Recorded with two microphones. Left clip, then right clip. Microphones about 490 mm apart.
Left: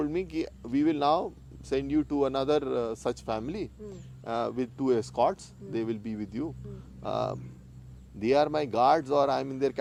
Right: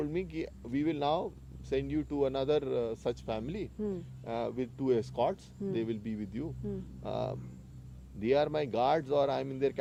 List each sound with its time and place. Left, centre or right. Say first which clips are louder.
0.0 s speech: left 5 dB; left